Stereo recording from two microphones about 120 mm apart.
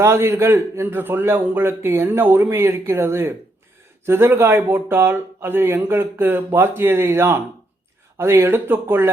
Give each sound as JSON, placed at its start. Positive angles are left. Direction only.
{"t": 0.0, "sound": "speech", "side_deg": -20}